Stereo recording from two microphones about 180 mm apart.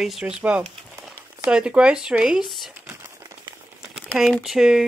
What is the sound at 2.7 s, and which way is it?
Crumpling, 15° right (ahead or behind).